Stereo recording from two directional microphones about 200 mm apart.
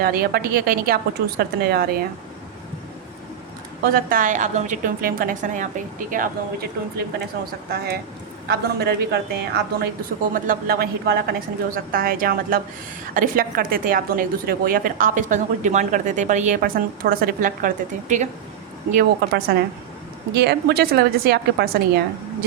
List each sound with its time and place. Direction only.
0.0 s a woman's voice: 50° right (ahead or behind)
3.8 s a woman's voice: 45° right (ahead or behind)
8.4 s a woman's voice: 55° right (ahead or behind)
20.3 s a woman's voice: 55° right (ahead or behind)